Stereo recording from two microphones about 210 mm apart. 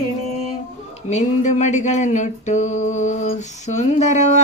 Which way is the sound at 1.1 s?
35° left (ahead or behind).